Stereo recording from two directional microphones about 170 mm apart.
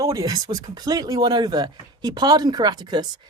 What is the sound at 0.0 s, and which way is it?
Speech, 20° right (ahead or behind).